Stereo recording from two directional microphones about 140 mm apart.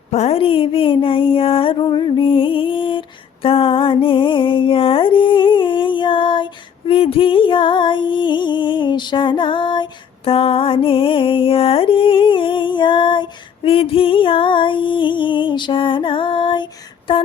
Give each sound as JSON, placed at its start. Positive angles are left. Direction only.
{"t": 0.1, "sound": "music", "side_deg": 50}